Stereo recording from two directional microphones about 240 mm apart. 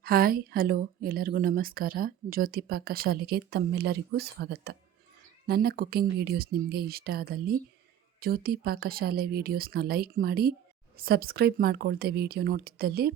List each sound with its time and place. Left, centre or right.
0.0 s speech: right